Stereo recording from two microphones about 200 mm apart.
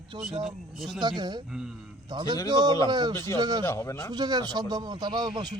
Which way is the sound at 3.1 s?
15° left (ahead or behind).